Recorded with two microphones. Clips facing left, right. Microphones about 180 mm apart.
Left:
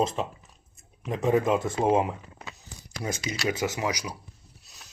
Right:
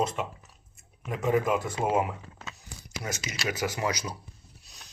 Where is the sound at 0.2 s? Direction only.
30° left (ahead or behind).